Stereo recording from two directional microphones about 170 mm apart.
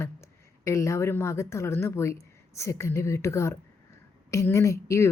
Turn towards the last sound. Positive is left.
turn(degrees=15)  # may be behind; listen again after turning